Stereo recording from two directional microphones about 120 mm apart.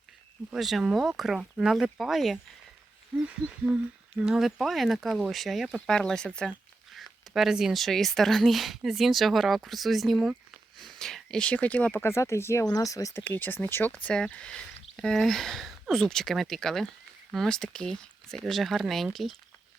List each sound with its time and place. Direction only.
0.5 s speech: centre (ahead or behind); by 13.2 s 25° left (ahead or behind)
13.2 s speech: 15° left (ahead or behind); by 19.4 s centre (ahead or behind)